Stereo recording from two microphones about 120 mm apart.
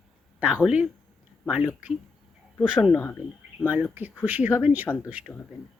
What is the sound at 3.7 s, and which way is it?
Speech, 15° right (ahead or behind).